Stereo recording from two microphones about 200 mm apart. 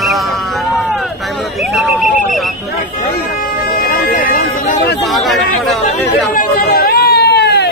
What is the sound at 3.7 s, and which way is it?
Speech, 45° left (ahead or behind).